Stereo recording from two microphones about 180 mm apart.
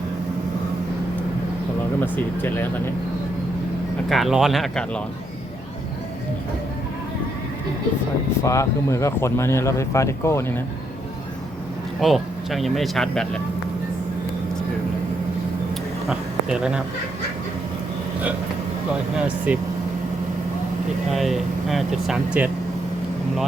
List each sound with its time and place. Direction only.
2.0 s speech: 10° left (ahead or behind)
4.1 s speech: centre (ahead or behind)
8.4 s speech: 15° left (ahead or behind)
11.9 s speech: centre (ahead or behind)
16.0 s speech: 5° right (ahead or behind)
19.5 s speech: 10° right (ahead or behind)
21.1 s speech: centre (ahead or behind)